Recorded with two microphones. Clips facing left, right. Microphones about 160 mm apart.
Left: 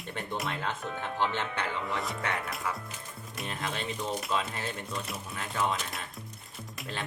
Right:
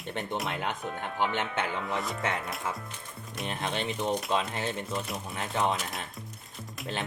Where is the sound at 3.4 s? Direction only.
25° right (ahead or behind).